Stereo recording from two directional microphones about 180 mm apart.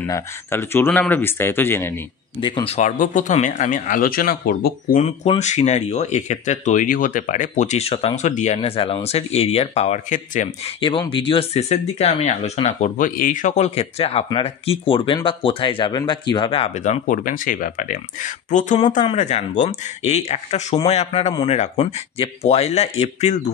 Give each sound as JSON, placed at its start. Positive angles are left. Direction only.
{"t": 0.0, "sound": "speech", "side_deg": 15}
{"t": 2.4, "sound": "speech", "side_deg": 30}
{"t": 5.0, "sound": "speech", "side_deg": 40}
{"t": 10.8, "sound": "speech", "side_deg": 25}